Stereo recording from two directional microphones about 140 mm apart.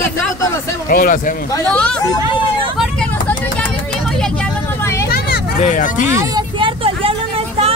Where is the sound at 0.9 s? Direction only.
85° left.